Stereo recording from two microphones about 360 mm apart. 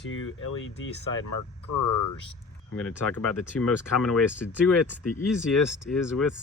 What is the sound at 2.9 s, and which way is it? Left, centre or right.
Speech, centre.